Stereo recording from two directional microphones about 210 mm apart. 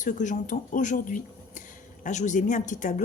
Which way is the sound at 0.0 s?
35° left (ahead or behind).